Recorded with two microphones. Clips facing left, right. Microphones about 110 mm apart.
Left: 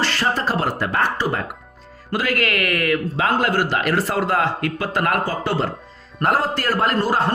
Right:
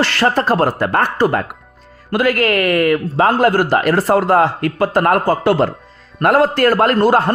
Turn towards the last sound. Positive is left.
turn(degrees=-55)  # may be behind; listen again after turning